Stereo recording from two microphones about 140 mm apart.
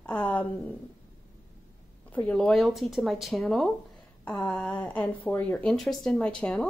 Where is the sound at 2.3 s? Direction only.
5° left (ahead or behind).